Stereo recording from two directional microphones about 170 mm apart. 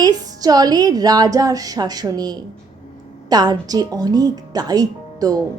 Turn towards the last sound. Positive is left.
turn(degrees=-20)  # may be behind; listen again after turning